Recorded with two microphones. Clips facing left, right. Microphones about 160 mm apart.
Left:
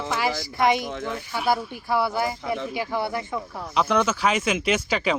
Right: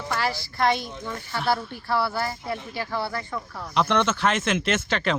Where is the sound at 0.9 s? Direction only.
90° left.